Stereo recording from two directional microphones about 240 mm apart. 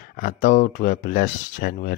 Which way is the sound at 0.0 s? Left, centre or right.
Left.